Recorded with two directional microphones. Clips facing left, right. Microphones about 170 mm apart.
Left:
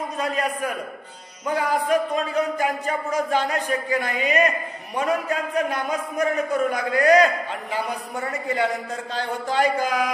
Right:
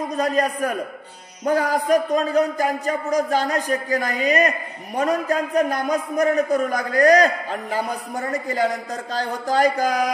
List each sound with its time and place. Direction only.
0.2 s a man's voice: 40° right (ahead or behind)